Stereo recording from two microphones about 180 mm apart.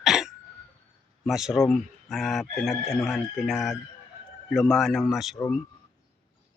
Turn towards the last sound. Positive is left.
turn(degrees=0)  # may be behind; listen again after turning